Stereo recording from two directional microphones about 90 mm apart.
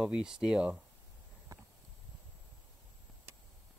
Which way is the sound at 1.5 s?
35° right (ahead or behind).